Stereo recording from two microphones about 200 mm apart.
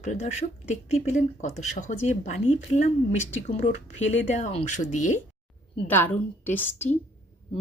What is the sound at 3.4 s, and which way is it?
Speech, 35° left (ahead or behind).